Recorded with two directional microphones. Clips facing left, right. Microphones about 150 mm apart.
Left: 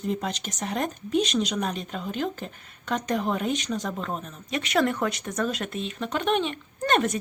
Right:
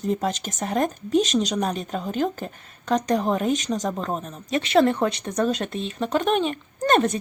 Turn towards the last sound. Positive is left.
turn(degrees=-35)  # may be behind; listen again after turning